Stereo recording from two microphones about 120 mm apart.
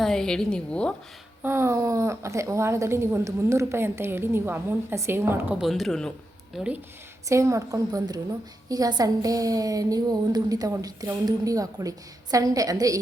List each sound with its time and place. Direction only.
0.0 s a woman's voice: 5° left (ahead or behind)
1.4 s a woman's voice: 20° right (ahead or behind)
5.5 s speech: centre (ahead or behind)
7.3 s a woman's voice: 25° right (ahead or behind)